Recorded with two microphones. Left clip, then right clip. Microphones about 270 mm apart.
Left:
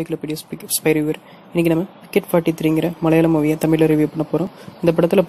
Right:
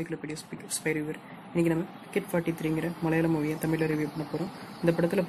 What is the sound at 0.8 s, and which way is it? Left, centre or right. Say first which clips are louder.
Speech: left 14 dB; left.